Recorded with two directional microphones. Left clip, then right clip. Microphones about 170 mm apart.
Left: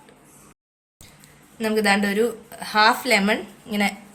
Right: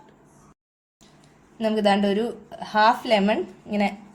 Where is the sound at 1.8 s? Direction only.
30° right (ahead or behind).